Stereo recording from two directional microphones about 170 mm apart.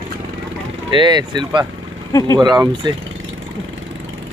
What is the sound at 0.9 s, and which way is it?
Speech, 25° right (ahead or behind).